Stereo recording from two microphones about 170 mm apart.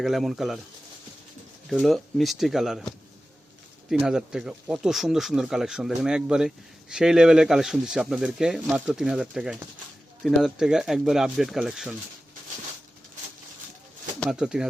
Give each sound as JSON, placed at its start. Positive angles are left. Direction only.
{"t": 0.0, "sound": "speech", "side_deg": 0}
{"t": 1.7, "sound": "speech", "side_deg": 0}
{"t": 4.0, "sound": "speech", "side_deg": -5}
{"t": 14.3, "sound": "speech", "side_deg": -5}